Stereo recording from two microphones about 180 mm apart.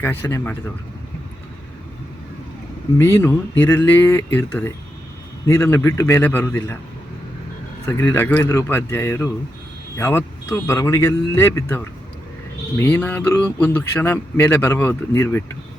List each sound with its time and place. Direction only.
0.0 s speech: 10° left (ahead or behind)
3.0 s speech: 15° left (ahead or behind)
7.9 s speech: 10° left (ahead or behind)